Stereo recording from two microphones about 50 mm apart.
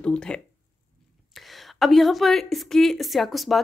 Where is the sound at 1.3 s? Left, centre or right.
Centre.